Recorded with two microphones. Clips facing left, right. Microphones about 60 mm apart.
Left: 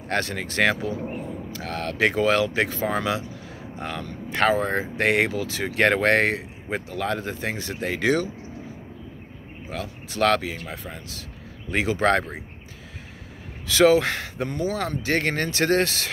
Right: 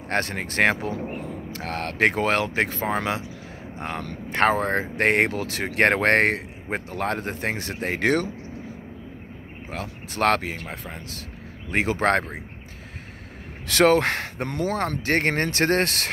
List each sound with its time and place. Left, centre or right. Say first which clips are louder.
0.1 s speech: even; right
9.7 s speech: left 1 dB; right
13.7 s speech: left 1 dB; right
14.8 s speech: right 1 dB; right